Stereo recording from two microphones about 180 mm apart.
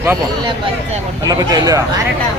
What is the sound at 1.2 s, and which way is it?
Speech, 20° right (ahead or behind).